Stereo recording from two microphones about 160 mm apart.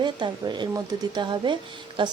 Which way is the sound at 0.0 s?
30° right (ahead or behind).